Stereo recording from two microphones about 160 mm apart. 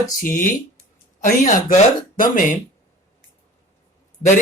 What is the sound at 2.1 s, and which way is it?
Speech, 60° left (ahead or behind).